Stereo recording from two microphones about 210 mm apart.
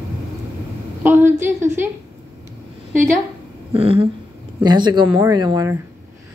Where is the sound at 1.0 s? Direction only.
10° right (ahead or behind).